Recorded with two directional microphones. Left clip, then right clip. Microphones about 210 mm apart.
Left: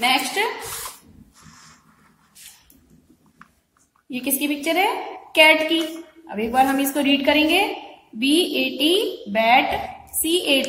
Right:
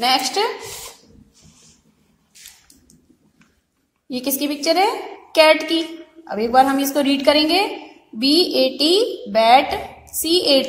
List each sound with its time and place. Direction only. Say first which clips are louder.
0.0 s a woman's voice: right 2 dB; 30° right (ahead or behind)
4.1 s a woman's voice: right 2 dB; 30° right (ahead or behind)